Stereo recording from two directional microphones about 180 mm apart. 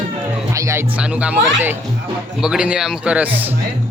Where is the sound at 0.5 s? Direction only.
15° right (ahead or behind).